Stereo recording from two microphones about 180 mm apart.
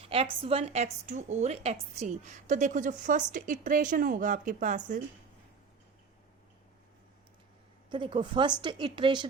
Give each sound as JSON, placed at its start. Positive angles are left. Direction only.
{"t": 0.1, "sound": "a woman's voice", "side_deg": -35}
{"t": 7.9, "sound": "a woman's voice", "side_deg": -25}